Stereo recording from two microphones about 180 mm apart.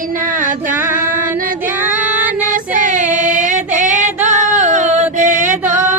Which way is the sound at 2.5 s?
45° right (ahead or behind).